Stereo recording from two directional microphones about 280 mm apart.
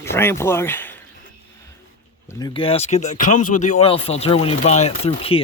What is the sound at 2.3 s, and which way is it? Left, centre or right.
Speech, centre.